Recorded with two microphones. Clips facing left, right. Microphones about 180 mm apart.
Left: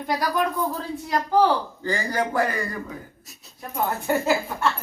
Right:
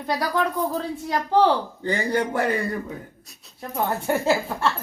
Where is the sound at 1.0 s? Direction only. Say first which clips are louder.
Even; 25° right (ahead or behind).